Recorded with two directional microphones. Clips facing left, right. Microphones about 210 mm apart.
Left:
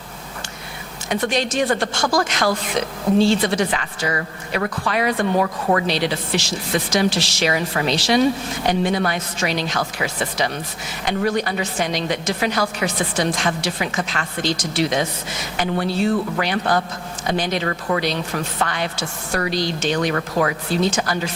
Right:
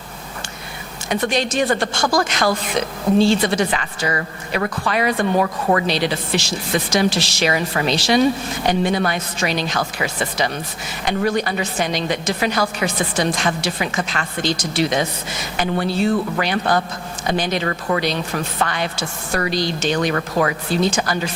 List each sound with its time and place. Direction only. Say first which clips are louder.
1.1 s a woman's voice: right 1 dB; 15° right (ahead or behind)
5.9 s a woman's voice: right 1 dB; 15° right (ahead or behind)